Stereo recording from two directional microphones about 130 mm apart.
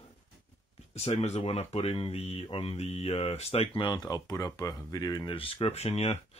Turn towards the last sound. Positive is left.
turn(degrees=55)  # may be behind; listen again after turning